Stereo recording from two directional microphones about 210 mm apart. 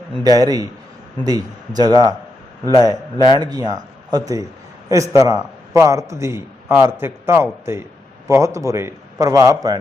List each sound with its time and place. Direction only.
0.2 s a man's voice: 15° right (ahead or behind)